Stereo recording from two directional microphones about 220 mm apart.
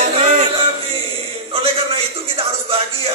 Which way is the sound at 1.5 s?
25° right (ahead or behind).